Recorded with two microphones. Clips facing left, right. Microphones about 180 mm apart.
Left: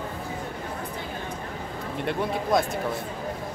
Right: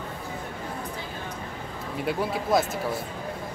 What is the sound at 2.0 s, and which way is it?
Speech, 5° right (ahead or behind).